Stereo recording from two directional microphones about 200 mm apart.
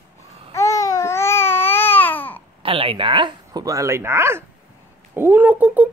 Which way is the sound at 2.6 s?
25° right (ahead or behind).